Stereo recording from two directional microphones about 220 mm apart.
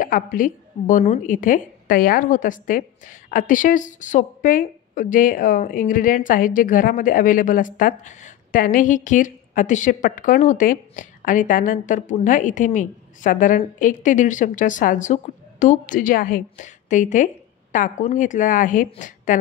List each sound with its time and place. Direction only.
0.0 s speech: 40° left (ahead or behind)